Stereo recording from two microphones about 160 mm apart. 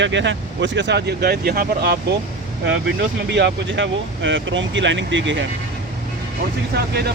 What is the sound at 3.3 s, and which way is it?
Speech, 90° right.